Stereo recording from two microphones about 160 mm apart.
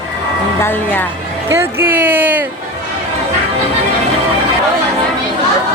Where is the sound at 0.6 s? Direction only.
15° left (ahead or behind).